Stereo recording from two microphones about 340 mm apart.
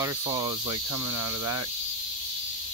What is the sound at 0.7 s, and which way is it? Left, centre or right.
Cricket, right.